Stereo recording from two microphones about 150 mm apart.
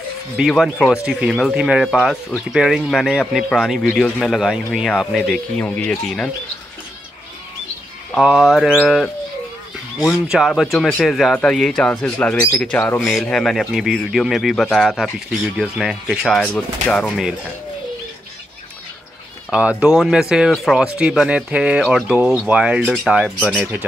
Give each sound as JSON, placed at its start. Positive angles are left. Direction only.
{"t": 0.4, "sound": "speech", "side_deg": 0}
{"t": 8.1, "sound": "speech", "side_deg": 0}
{"t": 19.5, "sound": "speech", "side_deg": -5}